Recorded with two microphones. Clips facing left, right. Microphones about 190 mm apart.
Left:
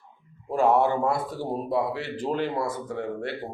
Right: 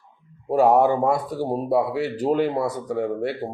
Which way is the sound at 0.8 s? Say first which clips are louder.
Right 4 dB; 15° right (ahead or behind).